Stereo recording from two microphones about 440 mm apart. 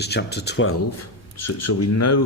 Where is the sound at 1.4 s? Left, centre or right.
Left.